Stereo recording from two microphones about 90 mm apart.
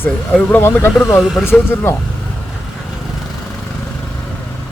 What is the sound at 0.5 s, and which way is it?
Speech, 25° left (ahead or behind).